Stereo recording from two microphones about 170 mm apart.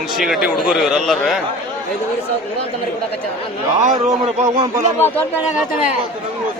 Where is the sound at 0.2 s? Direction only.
Centre (ahead or behind).